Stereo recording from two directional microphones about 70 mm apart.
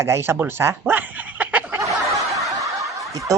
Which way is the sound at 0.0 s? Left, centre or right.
Right.